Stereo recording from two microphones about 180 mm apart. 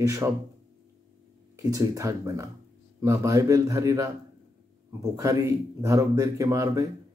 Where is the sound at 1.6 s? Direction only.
20° right (ahead or behind).